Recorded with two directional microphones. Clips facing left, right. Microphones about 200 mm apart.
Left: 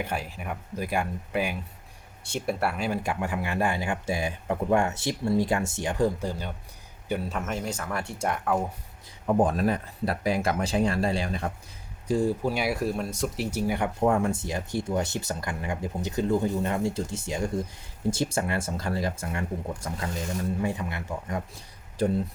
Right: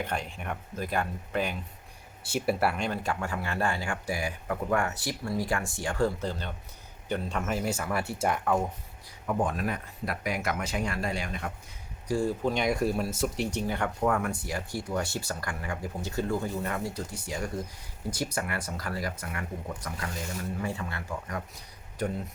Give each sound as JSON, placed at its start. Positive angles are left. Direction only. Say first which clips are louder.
{"t": 0.0, "sound": "speech", "louder": "left 1 dB", "side_deg": 5}
{"t": 2.2, "sound": "speech", "louder": "right 1 dB", "side_deg": -5}
{"t": 9.2, "sound": "speech", "louder": "left 6 dB", "side_deg": 35}
{"t": 12.0, "sound": "speech", "louder": "left 3 dB", "side_deg": 20}
{"t": 14.0, "sound": "speech", "louder": "left 5 dB", "side_deg": 25}
{"t": 22.0, "sound": "speech", "louder": "left 6 dB", "side_deg": 30}